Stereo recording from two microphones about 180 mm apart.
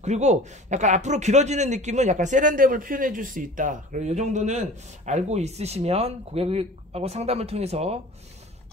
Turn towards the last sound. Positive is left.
turn(degrees=-35)  # may be behind; listen again after turning